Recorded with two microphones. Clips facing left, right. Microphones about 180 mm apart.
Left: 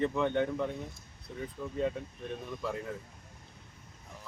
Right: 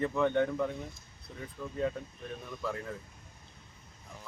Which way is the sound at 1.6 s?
10° left (ahead or behind).